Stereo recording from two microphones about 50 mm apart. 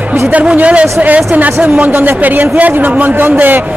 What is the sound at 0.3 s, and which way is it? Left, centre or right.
A man's voice, right.